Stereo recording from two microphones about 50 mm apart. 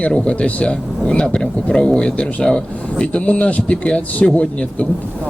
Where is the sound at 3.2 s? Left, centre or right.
Left.